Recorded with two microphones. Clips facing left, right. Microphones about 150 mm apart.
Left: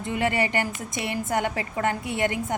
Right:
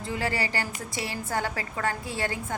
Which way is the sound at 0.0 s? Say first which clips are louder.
Left 5 dB; 20° left (ahead or behind).